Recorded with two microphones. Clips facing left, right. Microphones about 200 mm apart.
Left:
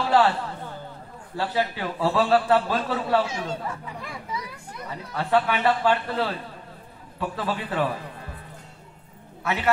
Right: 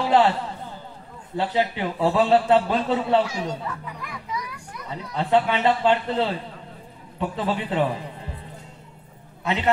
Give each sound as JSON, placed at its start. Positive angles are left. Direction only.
{"t": 0.0, "sound": "a man's voice", "side_deg": -20}
{"t": 1.3, "sound": "a man's voice", "side_deg": -20}
{"t": 3.8, "sound": "music", "side_deg": 30}
{"t": 4.8, "sound": "a man's voice", "side_deg": -20}
{"t": 9.4, "sound": "a man's voice", "side_deg": -20}